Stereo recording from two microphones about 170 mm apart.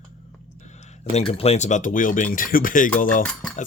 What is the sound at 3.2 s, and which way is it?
Speech, 5° left (ahead or behind).